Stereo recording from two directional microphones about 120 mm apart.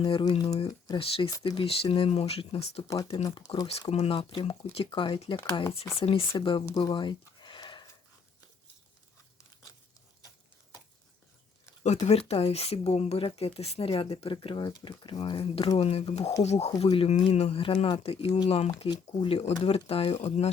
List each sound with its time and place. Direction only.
0.0 s speech: 45° left (ahead or behind)
0.9 s speech: 50° left (ahead or behind)
1.3 s speech: 35° left (ahead or behind)
1.6 s speech: 50° left (ahead or behind)
3.3 s speech: 40° left (ahead or behind)
3.7 s speech: 60° left (ahead or behind); by 6.7 s 40° left (ahead or behind)
6.7 s a sound: 40° left (ahead or behind)
11.8 s speech: 65° left (ahead or behind)